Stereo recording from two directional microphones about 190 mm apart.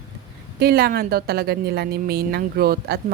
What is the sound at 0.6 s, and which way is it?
Speech, 55° right (ahead or behind).